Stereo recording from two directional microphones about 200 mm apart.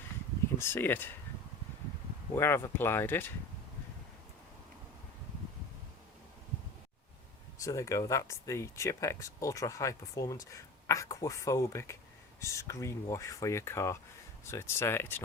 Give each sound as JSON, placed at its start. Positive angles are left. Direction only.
{"t": 0.6, "sound": "speech", "side_deg": 10}
{"t": 2.3, "sound": "speech", "side_deg": 10}
{"t": 7.6, "sound": "speech", "side_deg": 15}